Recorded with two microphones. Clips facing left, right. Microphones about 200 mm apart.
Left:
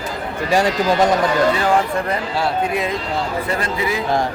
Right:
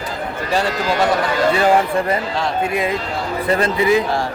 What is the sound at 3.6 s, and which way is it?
Speech, 25° right (ahead or behind).